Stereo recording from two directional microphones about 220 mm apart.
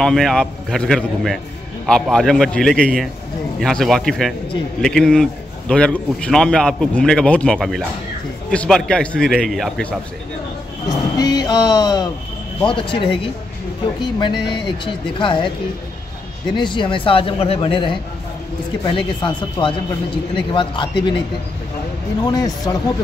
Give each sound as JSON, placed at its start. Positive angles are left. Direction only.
{"t": 0.0, "sound": "a man's voice", "side_deg": 0}
{"t": 10.9, "sound": "speech", "side_deg": 15}
{"t": 16.5, "sound": "speech", "side_deg": 20}
{"t": 22.2, "sound": "speech", "side_deg": 15}